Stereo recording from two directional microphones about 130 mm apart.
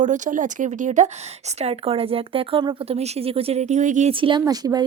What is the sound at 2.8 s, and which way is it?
Speech, 55° right (ahead or behind).